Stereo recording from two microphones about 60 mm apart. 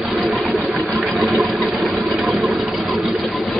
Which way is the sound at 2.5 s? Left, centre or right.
Centre.